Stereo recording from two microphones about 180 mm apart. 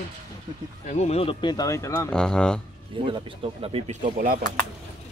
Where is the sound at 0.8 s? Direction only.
35° left (ahead or behind); by 2.1 s 15° left (ahead or behind).